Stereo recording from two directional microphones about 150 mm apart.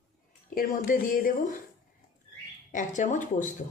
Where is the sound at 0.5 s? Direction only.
75° left (ahead or behind).